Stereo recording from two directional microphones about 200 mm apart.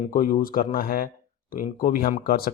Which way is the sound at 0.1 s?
45° left (ahead or behind).